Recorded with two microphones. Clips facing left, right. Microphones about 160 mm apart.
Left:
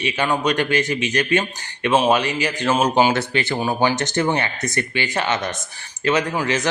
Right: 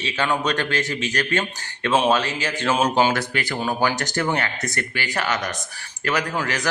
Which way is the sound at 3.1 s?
25° left (ahead or behind).